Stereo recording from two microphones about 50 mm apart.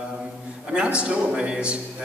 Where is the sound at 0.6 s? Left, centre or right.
Right.